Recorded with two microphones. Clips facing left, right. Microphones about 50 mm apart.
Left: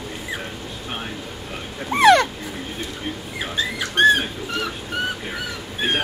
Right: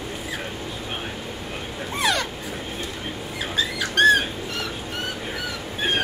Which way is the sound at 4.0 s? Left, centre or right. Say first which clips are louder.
Left 1 dB; left.